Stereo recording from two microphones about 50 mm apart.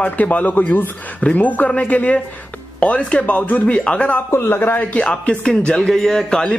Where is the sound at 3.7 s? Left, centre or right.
Left.